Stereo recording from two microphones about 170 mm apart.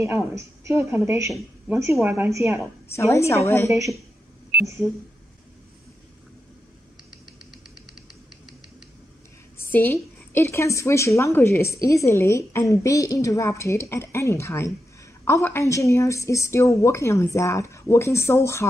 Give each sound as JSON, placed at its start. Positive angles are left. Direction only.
{"t": 0.3, "sound": "a woman's voice", "side_deg": -15}
{"t": 1.3, "sound": "a woman's voice", "side_deg": -5}
{"t": 2.9, "sound": "a woman's voice", "side_deg": 15}
{"t": 4.6, "sound": "speech", "side_deg": -15}
{"t": 9.6, "sound": "a sound", "side_deg": 10}
{"t": 10.3, "sound": "a woman's voice", "side_deg": 15}